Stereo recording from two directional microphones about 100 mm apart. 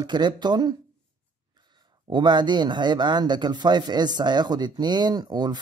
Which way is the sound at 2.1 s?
50° right (ahead or behind).